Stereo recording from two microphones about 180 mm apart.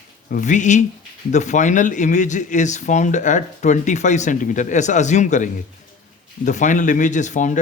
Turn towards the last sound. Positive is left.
turn(degrees=45)  # may be behind; listen again after turning